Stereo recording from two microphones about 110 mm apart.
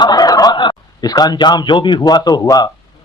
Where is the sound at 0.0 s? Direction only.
40° left (ahead or behind).